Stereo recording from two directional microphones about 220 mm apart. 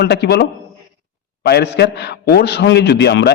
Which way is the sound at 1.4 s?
50° left (ahead or behind).